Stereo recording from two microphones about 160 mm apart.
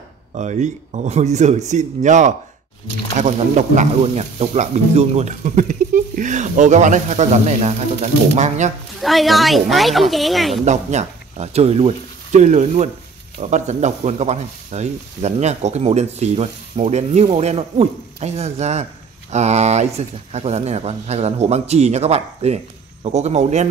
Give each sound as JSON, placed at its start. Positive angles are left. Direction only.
{"t": 0.3, "sound": "speech", "side_deg": -45}
{"t": 9.0, "sound": "speech", "side_deg": 0}
{"t": 10.6, "sound": "speech", "side_deg": -45}